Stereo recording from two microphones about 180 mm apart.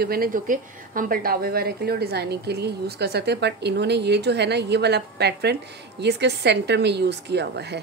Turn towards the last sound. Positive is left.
turn(degrees=-70)  # may be behind; listen again after turning